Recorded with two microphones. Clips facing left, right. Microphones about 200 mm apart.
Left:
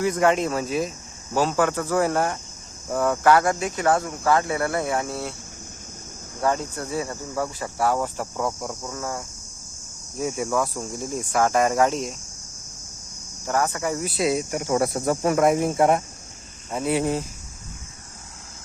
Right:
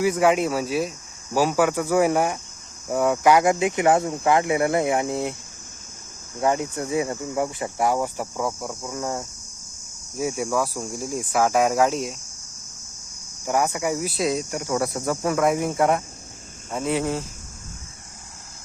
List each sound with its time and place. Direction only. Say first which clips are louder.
0.0 s speech: right 1 dB; 5° right (ahead or behind)
6.4 s speech: right 2 dB; 15° right (ahead or behind)
8.9 s speech: right 5 dB; 20° right (ahead or behind)
10.2 s cricket: even; 5° right (ahead or behind)
13.4 s speech: right 1 dB; 15° right (ahead or behind); by 14.6 s 5° left (ahead or behind)
14.6 s speech: left 2 dB; 25° left (ahead or behind)
16.7 s speech: left 1 dB; 5° left (ahead or behind)